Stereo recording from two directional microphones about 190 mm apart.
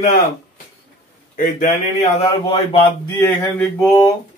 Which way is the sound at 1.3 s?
45° left (ahead or behind).